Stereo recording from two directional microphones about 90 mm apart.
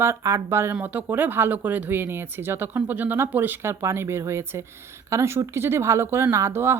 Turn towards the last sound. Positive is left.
turn(degrees=-25)  # may be behind; listen again after turning